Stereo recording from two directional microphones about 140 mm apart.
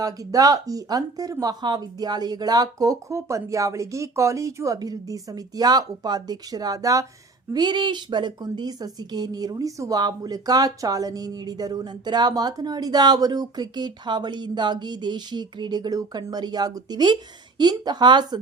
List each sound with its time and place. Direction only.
0.0 s a woman's voice: 25° right (ahead or behind)